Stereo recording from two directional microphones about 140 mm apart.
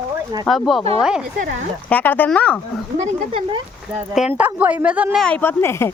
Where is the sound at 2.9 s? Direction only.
45° right (ahead or behind).